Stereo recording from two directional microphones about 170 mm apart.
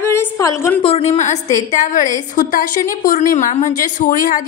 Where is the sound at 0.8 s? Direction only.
40° left (ahead or behind).